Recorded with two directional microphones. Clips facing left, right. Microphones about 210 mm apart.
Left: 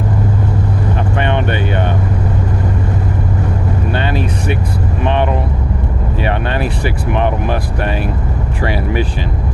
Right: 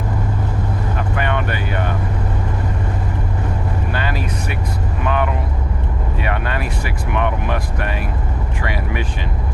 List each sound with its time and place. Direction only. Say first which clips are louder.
1.1 s vehicle: left 4 dB; 25° left (ahead or behind)
3.9 s vehicle: left 5 dB; 25° left (ahead or behind)
5.0 s speech: left 4 dB; 30° left (ahead or behind)